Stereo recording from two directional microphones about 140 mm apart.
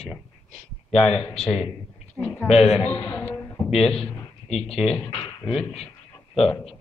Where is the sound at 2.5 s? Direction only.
45° left (ahead or behind).